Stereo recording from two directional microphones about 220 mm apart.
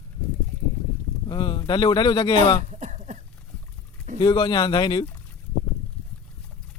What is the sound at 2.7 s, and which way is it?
Cough, 35° right (ahead or behind).